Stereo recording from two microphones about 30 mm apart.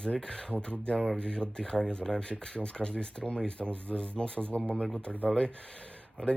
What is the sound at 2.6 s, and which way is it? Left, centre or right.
Speech, left.